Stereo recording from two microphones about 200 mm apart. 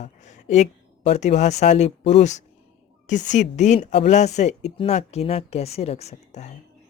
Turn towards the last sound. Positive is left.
turn(degrees=35)  # may be behind; listen again after turning